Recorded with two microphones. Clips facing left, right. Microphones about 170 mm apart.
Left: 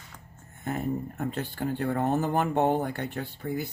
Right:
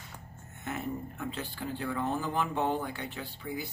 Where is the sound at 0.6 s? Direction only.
40° left (ahead or behind).